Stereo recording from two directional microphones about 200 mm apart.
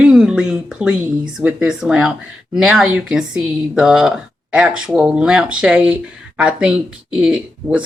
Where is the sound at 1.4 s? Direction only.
5° right (ahead or behind).